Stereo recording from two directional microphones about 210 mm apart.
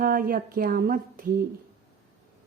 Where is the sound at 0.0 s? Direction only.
40° right (ahead or behind).